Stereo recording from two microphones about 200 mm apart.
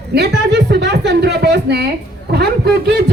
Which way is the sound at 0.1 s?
55° right (ahead or behind).